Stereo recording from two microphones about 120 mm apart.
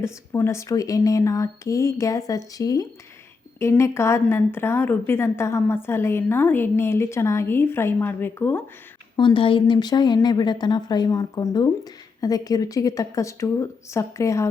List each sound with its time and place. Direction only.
0.0 s a woman's voice: 20° left (ahead or behind)
9.1 s a woman's voice: 45° left (ahead or behind); by 14.5 s 25° left (ahead or behind)